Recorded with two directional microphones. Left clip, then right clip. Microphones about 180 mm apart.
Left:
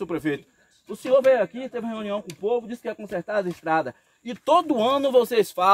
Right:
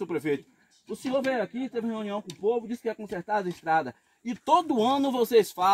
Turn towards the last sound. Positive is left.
turn(degrees=20)  # may be behind; listen again after turning